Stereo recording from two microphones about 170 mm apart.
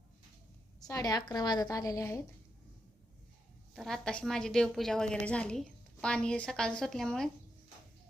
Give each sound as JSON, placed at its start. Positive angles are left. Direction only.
{"t": 0.8, "sound": "a woman's voice", "side_deg": 20}
{"t": 3.8, "sound": "a woman's voice", "side_deg": 5}